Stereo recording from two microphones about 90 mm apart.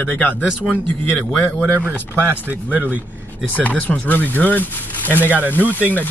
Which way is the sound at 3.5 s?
15° left (ahead or behind).